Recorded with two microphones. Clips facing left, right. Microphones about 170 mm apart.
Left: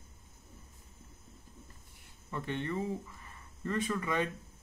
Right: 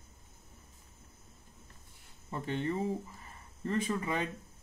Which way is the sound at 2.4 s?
30° right (ahead or behind).